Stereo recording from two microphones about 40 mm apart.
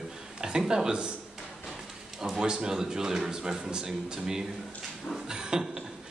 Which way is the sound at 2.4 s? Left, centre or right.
Centre.